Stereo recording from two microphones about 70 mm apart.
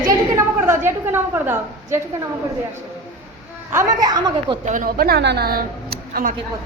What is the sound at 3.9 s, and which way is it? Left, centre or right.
Speech, right.